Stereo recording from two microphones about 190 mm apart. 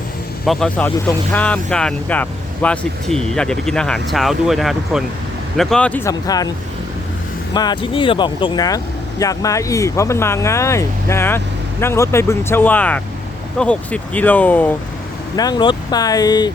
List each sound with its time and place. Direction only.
0.4 s speech: centre (ahead or behind); by 6.5 s 20° left (ahead or behind)
7.5 s speech: 20° left (ahead or behind)
15.4 s speech: 20° left (ahead or behind)